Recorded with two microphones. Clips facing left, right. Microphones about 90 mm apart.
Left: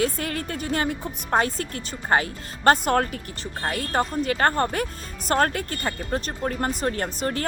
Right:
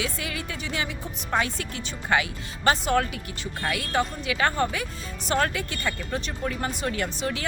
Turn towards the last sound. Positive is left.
turn(degrees=45)  # may be behind; listen again after turning